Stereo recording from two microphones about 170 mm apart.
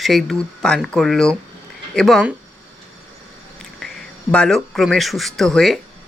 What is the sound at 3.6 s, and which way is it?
Speech, 5° left (ahead or behind).